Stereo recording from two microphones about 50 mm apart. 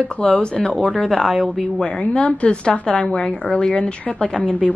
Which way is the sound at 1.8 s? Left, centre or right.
Left.